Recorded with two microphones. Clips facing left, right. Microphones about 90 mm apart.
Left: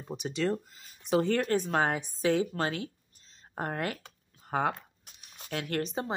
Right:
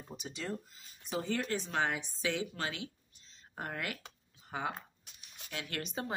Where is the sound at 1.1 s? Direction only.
55° left (ahead or behind); by 4.0 s 40° left (ahead or behind).